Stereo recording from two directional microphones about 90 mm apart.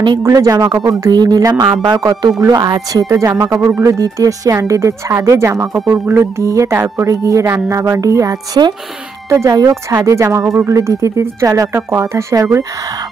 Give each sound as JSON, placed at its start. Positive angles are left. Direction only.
{"t": 0.2, "sound": "speech", "side_deg": -35}
{"t": 1.1, "sound": "speech", "side_deg": -50}
{"t": 11.7, "sound": "speech", "side_deg": -30}